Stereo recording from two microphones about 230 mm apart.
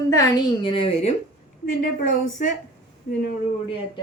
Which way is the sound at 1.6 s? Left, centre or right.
Left.